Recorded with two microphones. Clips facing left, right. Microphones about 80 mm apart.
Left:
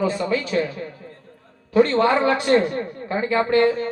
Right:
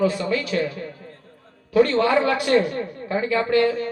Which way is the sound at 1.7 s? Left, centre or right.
Left.